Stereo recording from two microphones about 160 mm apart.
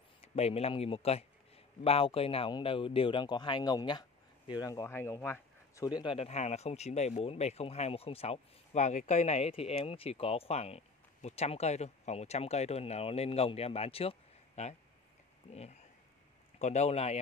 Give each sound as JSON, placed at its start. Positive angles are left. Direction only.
{"t": 0.4, "sound": "speech", "side_deg": 40}
{"t": 5.9, "sound": "speech", "side_deg": 30}
{"t": 6.1, "sound": "speech", "side_deg": 45}